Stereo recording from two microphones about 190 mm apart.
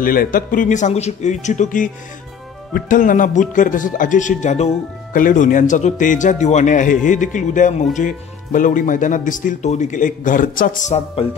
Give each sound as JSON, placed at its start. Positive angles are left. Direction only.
{"t": 0.0, "sound": "a man's voice", "side_deg": 50}
{"t": 11.2, "sound": "speech", "side_deg": 30}